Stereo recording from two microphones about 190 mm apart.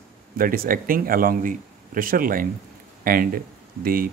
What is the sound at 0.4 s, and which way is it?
Speech, 50° right (ahead or behind).